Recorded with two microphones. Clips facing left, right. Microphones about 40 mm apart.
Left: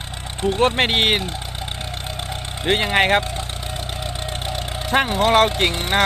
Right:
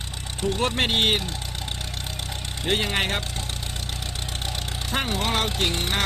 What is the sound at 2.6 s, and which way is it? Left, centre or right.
Speech, left.